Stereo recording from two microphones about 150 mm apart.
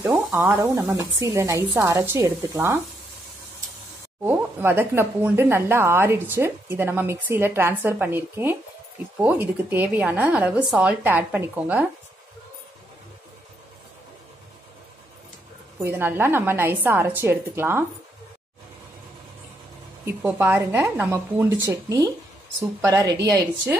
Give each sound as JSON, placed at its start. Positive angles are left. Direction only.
{"t": 0.0, "sound": "speech", "side_deg": 0}
{"t": 0.4, "sound": "a woman's voice", "side_deg": -15}
{"t": 4.2, "sound": "speech", "side_deg": -15}
{"t": 15.8, "sound": "speech", "side_deg": -15}
{"t": 20.2, "sound": "speech", "side_deg": -10}
{"t": 21.6, "sound": "a woman's voice", "side_deg": -20}